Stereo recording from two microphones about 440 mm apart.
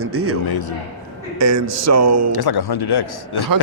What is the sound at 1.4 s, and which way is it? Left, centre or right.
Speech, right.